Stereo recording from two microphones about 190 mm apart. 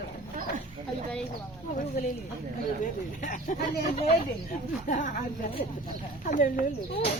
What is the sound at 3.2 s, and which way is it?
Speech, 40° left (ahead or behind).